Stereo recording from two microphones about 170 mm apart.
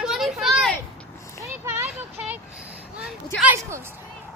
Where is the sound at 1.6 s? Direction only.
15° right (ahead or behind).